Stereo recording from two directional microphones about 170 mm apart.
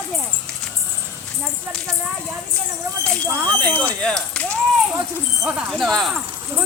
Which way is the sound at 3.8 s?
5° left (ahead or behind).